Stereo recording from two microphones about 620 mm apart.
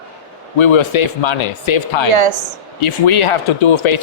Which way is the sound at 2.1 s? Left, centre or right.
Right.